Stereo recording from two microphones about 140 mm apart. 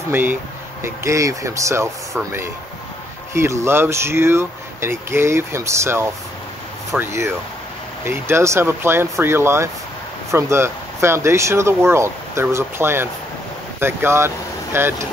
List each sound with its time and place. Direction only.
0.1 s speech: 15° right (ahead or behind)